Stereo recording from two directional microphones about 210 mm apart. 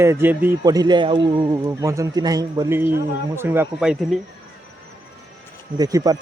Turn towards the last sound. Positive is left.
turn(degrees=-20)  # may be behind; listen again after turning